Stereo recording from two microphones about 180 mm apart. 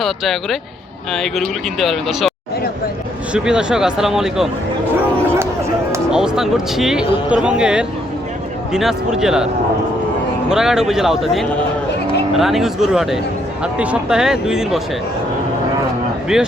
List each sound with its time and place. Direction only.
1.1 s speech: centre (ahead or behind)
3.3 s speech: 5° right (ahead or behind)
6.1 s speech: 5° right (ahead or behind)
10.5 s speech: 5° right (ahead or behind)
16.3 s speech: 5° right (ahead or behind)